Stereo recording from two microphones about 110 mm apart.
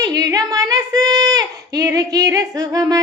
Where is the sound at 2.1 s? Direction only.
30° right (ahead or behind).